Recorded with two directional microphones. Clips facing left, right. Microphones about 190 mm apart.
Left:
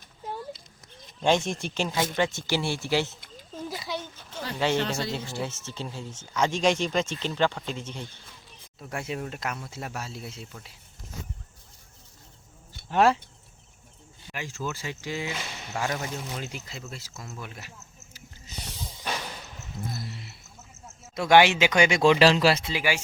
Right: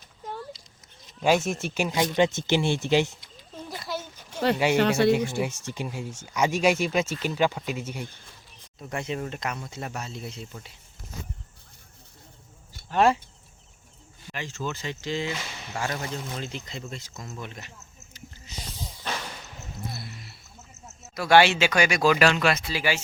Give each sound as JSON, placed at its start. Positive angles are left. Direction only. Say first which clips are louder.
{"t": 1.2, "sound": "speech", "louder": "right 1 dB", "side_deg": -5}
{"t": 3.7, "sound": "a sound", "louder": "right 2 dB", "side_deg": 0}
{"t": 4.5, "sound": "speech", "louder": "left 1 dB", "side_deg": -10}
{"t": 4.8, "sound": "speech", "louder": "right 9 dB", "side_deg": -65}
{"t": 5.4, "sound": "speech", "louder": "right 4 dB", "side_deg": -15}
{"t": 8.8, "sound": "speech", "louder": "right 2 dB", "side_deg": 5}
{"t": 14.3, "sound": "speech", "louder": "right 1 dB", "side_deg": 10}
{"t": 18.9, "sound": "a sound", "louder": "left 1 dB", "side_deg": 10}
{"t": 21.2, "sound": "speech", "louder": "even", "side_deg": 15}
{"t": 22.7, "sound": "speech", "louder": "even", "side_deg": 15}